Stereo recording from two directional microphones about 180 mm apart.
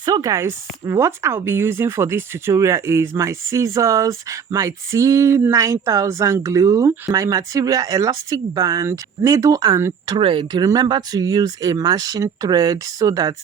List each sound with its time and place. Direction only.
0.0 s speech: 20° right (ahead or behind)